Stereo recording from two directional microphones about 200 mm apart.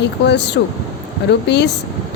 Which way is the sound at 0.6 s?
60° left (ahead or behind).